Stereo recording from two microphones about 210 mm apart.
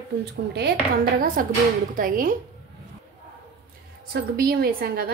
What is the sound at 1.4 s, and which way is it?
Speech, 40° right (ahead or behind).